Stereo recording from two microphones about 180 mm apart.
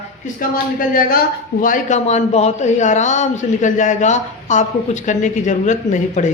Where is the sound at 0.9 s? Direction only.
55° left (ahead or behind).